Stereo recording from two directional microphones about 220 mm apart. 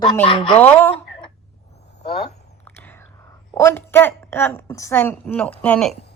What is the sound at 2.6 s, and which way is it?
Whispering, 10° left (ahead or behind).